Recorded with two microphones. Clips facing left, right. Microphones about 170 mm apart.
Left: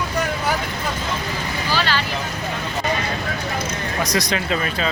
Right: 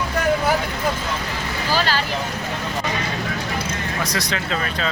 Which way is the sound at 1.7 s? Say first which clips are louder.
Right 1 dB; 40° right (ahead or behind).